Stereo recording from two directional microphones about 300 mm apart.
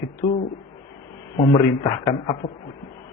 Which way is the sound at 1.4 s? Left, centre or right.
Centre.